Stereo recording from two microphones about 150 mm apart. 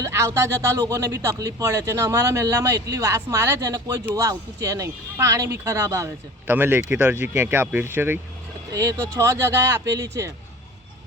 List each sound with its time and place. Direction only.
0.0 s speech: 20° right (ahead or behind)